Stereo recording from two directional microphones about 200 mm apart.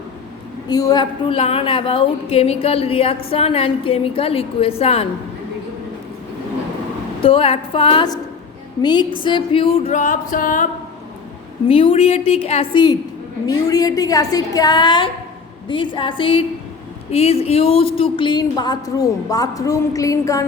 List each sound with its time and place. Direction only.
0.7 s a woman's voice: 20° left (ahead or behind)
7.2 s a woman's voice: 25° left (ahead or behind)
9.2 s music: 25° left (ahead or behind); by 10.7 s 45° left (ahead or behind)
11.7 s a woman's voice: 25° left (ahead or behind)
17.1 s music: 30° left (ahead or behind)
17.9 s a woman's voice: 25° left (ahead or behind)